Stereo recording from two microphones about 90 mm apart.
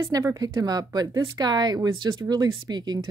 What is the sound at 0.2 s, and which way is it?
Speech, 40° right (ahead or behind).